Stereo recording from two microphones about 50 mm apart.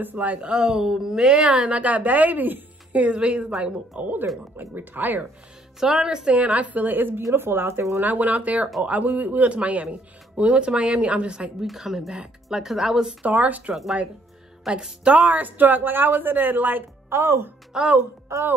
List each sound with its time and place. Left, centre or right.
0.0 s speech: right
0.5 s a woman's voice: centre
4.0 s speech: right
5.8 s speech: centre
6.3 s speech: right
8.0 s a woman's voice: right
11.6 s speech: centre
13.2 s speech: right
14.7 s speech: centre
15.1 s speech: right
17.1 s speech: right
17.7 s speech: centre
18.3 s a woman's voice: right